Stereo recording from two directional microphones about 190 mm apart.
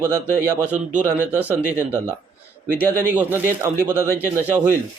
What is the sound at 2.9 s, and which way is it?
Speech, 10° right (ahead or behind).